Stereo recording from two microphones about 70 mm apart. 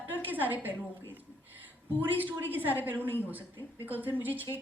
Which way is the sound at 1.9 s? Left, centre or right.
Right.